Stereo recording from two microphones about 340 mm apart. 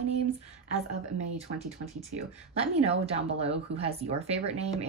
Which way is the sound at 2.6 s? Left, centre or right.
Centre.